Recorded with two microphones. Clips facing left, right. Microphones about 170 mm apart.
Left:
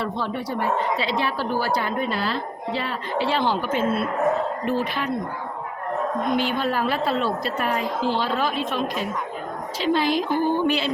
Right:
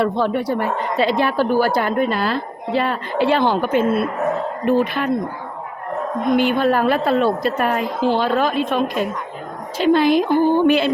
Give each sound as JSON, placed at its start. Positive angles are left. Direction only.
{"t": 0.0, "sound": "a woman's voice", "side_deg": -60}
{"t": 6.3, "sound": "a woman's voice", "side_deg": -55}